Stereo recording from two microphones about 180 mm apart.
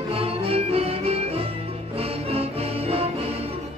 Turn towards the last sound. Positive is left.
turn(degrees=-35)  # may be behind; listen again after turning